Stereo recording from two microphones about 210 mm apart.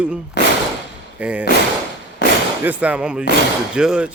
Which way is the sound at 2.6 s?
5° right (ahead or behind).